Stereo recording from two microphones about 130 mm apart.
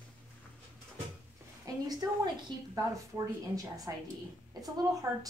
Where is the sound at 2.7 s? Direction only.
25° right (ahead or behind).